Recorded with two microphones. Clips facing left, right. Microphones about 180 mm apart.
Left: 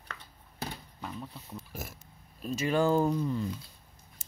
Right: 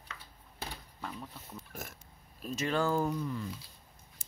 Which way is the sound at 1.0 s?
5° left (ahead or behind).